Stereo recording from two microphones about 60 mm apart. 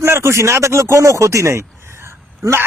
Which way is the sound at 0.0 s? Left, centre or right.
Right.